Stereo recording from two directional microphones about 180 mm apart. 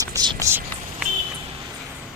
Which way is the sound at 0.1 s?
20° right (ahead or behind).